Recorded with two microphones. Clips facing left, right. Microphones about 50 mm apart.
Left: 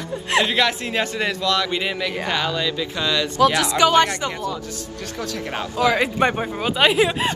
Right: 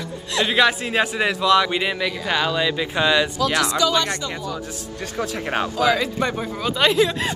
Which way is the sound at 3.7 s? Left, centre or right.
Left.